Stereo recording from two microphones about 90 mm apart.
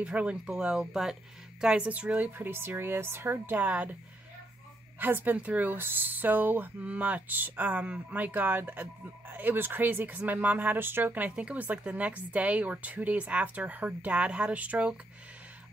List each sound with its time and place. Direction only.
0.0 s speech: 15° right (ahead or behind)
4.9 s speech: 20° right (ahead or behind)